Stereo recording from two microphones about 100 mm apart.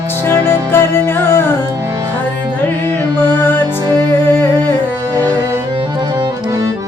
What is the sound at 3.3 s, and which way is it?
Music, 20° left (ahead or behind).